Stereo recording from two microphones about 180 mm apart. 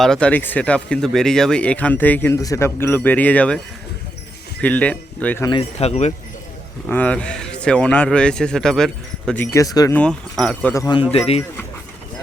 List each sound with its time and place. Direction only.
0.0 s speech: 5° left (ahead or behind)
4.6 s speech: 5° left (ahead or behind)
5.5 s speech: 30° left (ahead or behind)
6.8 s speech: 5° left (ahead or behind)
9.9 s speech: 5° left (ahead or behind)
11.1 s speech: 35° left (ahead or behind)